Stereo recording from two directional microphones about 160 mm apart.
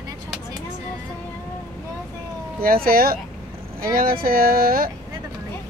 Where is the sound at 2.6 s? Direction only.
65° right (ahead or behind).